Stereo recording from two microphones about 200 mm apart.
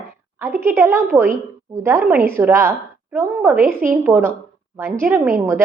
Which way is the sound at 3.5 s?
45° right (ahead or behind).